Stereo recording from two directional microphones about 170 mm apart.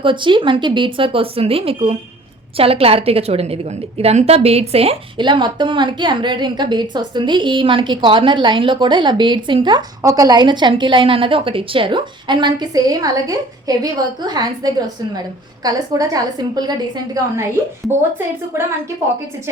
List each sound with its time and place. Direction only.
0.0 s a woman's voice: 30° right (ahead or behind)